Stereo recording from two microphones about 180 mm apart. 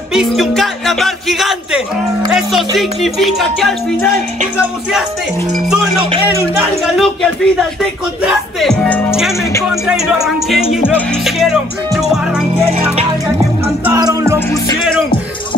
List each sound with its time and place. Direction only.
0.1 s music: centre (ahead or behind)
2.3 s speech: centre (ahead or behind)
7.0 s speech: centre (ahead or behind)
13.9 s music: 20° right (ahead or behind)